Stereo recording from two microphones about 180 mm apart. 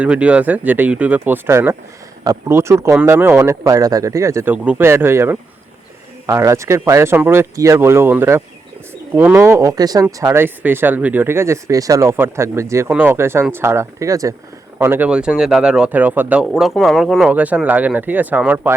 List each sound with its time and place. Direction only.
0.0 s speech: 5° right (ahead or behind)